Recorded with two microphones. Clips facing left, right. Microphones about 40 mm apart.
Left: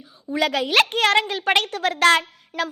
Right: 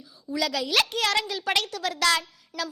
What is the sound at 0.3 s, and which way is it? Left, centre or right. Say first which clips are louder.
A woman's voice: left 6 dB; left.